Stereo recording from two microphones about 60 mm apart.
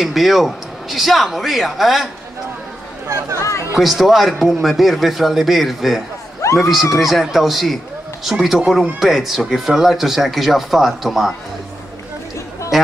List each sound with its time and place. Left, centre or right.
0.0 s speech: centre
3.3 s speech: left
3.8 s speech: centre
6.4 s a man's voice: left
6.9 s speech: centre
12.7 s a sound: centre